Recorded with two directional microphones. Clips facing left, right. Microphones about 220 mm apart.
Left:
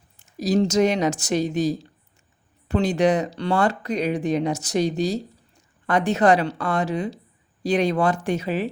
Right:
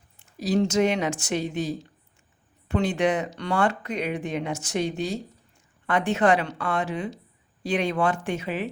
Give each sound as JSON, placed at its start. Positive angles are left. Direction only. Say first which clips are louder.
{"t": 0.2, "sound": "speech", "louder": "left 3 dB", "side_deg": 40}